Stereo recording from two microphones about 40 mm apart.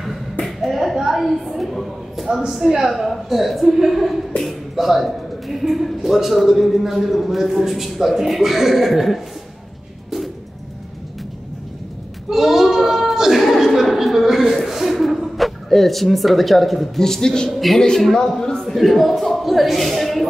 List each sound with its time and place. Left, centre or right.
0.5 s a sound: centre
2.7 s speech: centre
12.3 s a sound: centre
17.0 s speech: centre
17.5 s a woman's voice: centre
17.7 s speech: centre
18.8 s speech: centre